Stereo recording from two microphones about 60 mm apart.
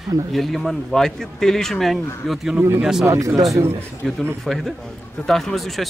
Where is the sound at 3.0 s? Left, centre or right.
Right.